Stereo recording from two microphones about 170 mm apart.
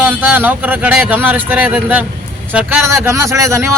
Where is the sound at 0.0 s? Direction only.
10° right (ahead or behind).